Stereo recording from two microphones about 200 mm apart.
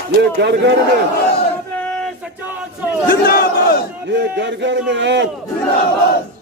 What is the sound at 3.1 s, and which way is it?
Battle cry, 50° left (ahead or behind).